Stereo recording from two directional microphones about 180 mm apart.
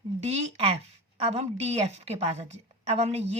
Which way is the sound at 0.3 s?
35° right (ahead or behind).